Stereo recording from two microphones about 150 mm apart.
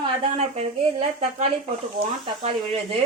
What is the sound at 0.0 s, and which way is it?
Speech, 45° right (ahead or behind).